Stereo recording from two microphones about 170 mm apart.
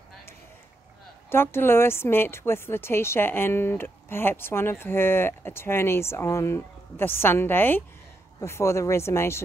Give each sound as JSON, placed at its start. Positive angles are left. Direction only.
{"t": 1.3, "sound": "a woman's voice", "side_deg": 15}